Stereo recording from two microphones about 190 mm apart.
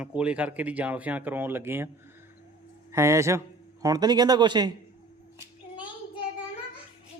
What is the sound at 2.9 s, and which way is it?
A man's voice, 15° right (ahead or behind).